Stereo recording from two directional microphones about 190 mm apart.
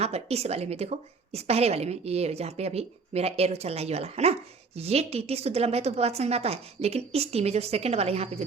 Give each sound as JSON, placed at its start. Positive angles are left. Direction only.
{"t": 0.0, "sound": "a woman's voice", "side_deg": -35}